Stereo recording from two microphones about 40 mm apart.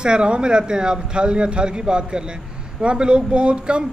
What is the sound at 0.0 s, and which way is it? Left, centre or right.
Speech, right.